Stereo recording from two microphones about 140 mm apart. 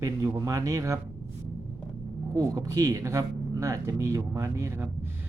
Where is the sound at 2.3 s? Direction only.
25° right (ahead or behind).